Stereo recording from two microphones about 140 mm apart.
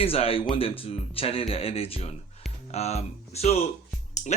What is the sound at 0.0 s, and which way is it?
Speech, 45° left (ahead or behind).